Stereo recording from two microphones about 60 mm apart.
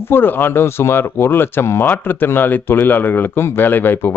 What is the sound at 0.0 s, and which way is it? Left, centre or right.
Speech, left.